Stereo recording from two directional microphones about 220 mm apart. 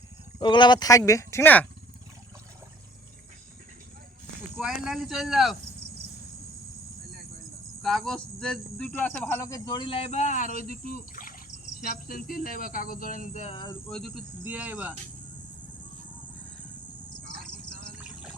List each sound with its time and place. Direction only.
0.3 s speech: 20° left (ahead or behind)
4.5 s speech: centre (ahead or behind)
7.8 s speech: centre (ahead or behind); by 13.9 s 15° left (ahead or behind)
13.9 s speech: 5° right (ahead or behind)